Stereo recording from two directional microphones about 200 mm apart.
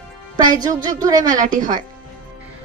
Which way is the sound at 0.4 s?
20° right (ahead or behind).